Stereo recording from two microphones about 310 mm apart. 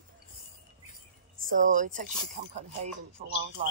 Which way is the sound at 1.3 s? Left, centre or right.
Right.